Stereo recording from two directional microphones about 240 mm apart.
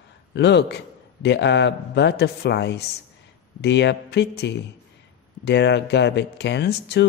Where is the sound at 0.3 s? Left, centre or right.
Left.